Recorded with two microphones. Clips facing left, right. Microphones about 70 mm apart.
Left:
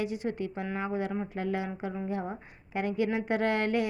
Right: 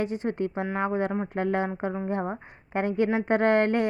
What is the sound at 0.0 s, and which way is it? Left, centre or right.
A woman's voice, right.